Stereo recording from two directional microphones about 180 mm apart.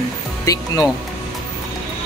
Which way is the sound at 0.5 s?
20° left (ahead or behind).